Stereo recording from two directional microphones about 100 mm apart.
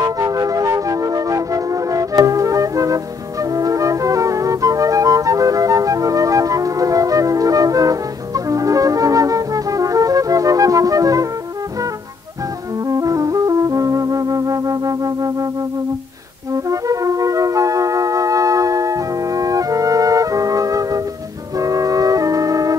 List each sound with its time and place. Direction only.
0.0 s music: 35° right (ahead or behind)
12.8 s music: 35° right (ahead or behind)
16.5 s flute: 35° right (ahead or behind)
21.5 s music: 35° right (ahead or behind)